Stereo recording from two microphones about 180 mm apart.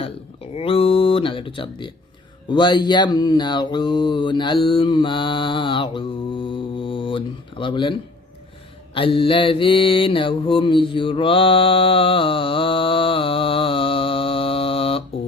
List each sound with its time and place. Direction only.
0.5 s a sound: 30° left (ahead or behind)
2.5 s mantra: 25° left (ahead or behind)
9.0 s mantra: 30° left (ahead or behind)